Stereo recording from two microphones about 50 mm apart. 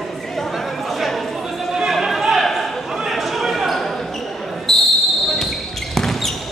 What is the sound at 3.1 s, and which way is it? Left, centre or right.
Basketball bounce, centre.